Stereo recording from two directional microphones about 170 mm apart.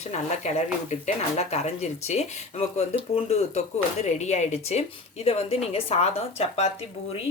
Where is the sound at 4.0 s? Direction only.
40° left (ahead or behind).